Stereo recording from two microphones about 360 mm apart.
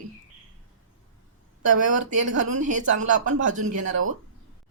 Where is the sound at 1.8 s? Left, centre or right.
Right.